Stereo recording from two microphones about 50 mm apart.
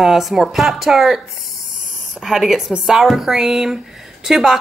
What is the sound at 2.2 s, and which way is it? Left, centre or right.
Speech, centre.